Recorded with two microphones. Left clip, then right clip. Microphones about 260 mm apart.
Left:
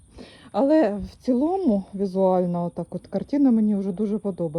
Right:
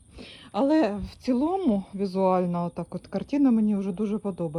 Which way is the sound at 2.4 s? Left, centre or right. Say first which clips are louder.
Left 3 dB; centre.